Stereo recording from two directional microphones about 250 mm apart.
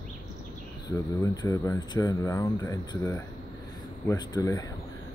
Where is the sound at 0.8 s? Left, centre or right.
Centre.